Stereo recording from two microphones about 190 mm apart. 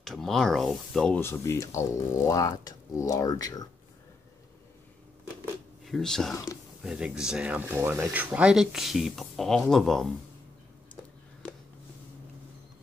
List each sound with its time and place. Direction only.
0.0 s speech: centre (ahead or behind); by 3.6 s 20° left (ahead or behind)
5.9 s speech: centre (ahead or behind)
6.3 s speech: 15° left (ahead or behind)
6.8 s speech: 5° right (ahead or behind)